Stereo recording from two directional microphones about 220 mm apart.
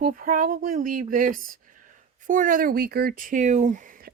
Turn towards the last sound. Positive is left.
turn(degrees=-35)  # may be behind; listen again after turning